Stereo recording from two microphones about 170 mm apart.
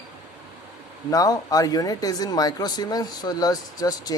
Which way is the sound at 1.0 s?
20° left (ahead or behind).